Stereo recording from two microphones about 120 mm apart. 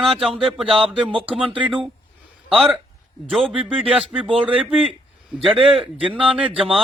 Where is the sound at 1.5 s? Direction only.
10° right (ahead or behind).